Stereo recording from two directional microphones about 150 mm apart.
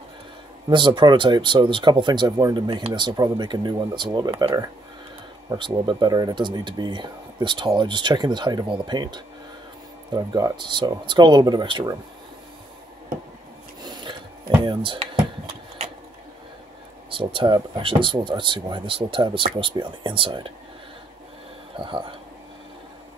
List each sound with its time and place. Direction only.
0.7 s speech: 30° right (ahead or behind)
14.6 s speech: 35° right (ahead or behind)
17.1 s speech: 35° right (ahead or behind)
21.7 s speech: 35° right (ahead or behind)